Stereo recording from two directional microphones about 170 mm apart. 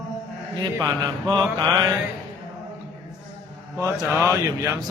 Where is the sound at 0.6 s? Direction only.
20° right (ahead or behind).